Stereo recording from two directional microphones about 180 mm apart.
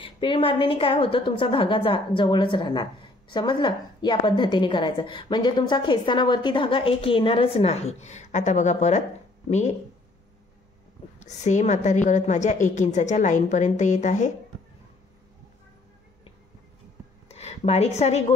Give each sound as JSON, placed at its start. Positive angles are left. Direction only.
{"t": 0.0, "sound": "a woman's voice", "side_deg": 30}
{"t": 11.1, "sound": "a woman's voice", "side_deg": 40}
{"t": 17.3, "sound": "speech", "side_deg": 35}